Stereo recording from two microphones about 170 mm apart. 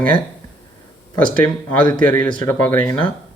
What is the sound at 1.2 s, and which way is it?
Speech, 10° left (ahead or behind).